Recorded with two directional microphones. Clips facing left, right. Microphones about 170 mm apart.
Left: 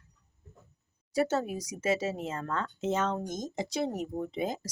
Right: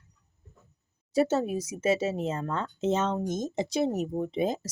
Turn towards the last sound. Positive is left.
turn(degrees=-25)  # may be behind; listen again after turning